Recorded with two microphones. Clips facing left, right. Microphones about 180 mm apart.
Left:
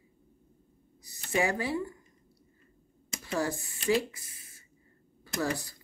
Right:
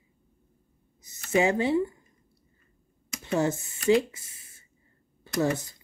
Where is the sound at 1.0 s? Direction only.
20° right (ahead or behind).